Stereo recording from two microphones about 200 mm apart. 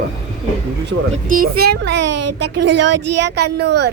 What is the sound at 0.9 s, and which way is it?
A woman's voice, 50° right (ahead or behind).